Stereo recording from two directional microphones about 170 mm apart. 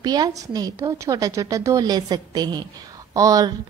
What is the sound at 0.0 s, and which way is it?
A woman's voice, 25° right (ahead or behind).